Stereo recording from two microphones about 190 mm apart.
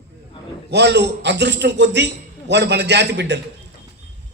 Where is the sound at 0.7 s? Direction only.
65° right (ahead or behind).